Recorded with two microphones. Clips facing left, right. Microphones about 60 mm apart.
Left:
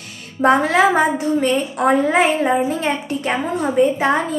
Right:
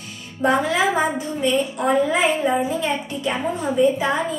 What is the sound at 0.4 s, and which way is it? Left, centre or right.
A woman's voice, left.